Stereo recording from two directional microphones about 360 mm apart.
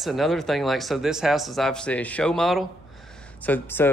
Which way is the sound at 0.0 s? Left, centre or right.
Centre.